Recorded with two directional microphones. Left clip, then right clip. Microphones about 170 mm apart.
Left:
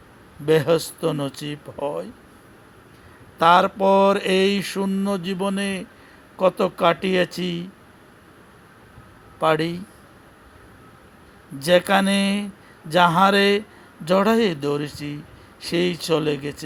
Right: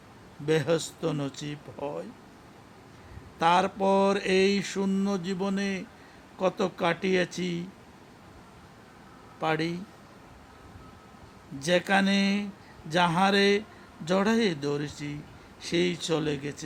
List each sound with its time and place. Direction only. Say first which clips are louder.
0.4 s mantra: left 8 dB; 15° left (ahead or behind)
3.3 s mantra: left 8 dB; 15° left (ahead or behind)
9.4 s mantra: left 8 dB; 15° left (ahead or behind)
11.6 s mantra: left 7 dB; 15° left (ahead or behind)